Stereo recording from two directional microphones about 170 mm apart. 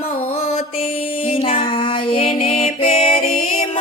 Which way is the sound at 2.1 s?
35° left (ahead or behind).